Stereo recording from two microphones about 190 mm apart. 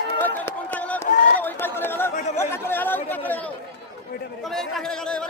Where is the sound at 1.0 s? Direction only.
40° left (ahead or behind).